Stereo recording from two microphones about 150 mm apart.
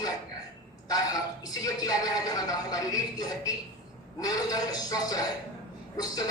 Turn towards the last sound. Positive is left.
turn(degrees=25)  # may be behind; listen again after turning